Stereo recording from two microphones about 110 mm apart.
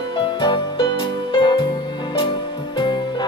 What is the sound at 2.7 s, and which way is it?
Music, 45° left (ahead or behind).